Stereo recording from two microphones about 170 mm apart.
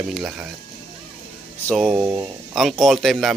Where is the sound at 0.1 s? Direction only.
5° right (ahead or behind).